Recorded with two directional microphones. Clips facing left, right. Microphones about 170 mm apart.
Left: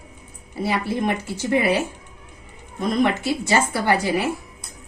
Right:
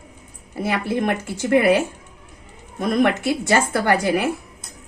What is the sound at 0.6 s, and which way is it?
A woman's voice, 55° right (ahead or behind).